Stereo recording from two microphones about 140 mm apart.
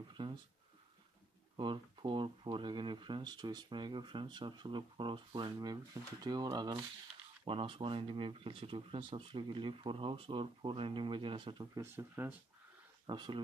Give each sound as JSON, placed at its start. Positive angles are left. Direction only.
{"t": 0.1, "sound": "speech", "side_deg": -35}
{"t": 1.6, "sound": "speech", "side_deg": -35}
{"t": 13.0, "sound": "speech", "side_deg": -30}